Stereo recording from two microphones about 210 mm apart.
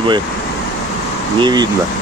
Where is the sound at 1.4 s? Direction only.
20° right (ahead or behind).